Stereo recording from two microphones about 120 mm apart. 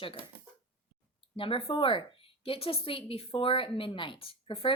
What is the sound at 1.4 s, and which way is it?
A woman's voice, 50° left (ahead or behind).